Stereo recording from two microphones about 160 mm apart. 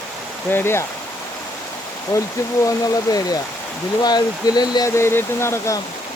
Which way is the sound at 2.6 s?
25° left (ahead or behind).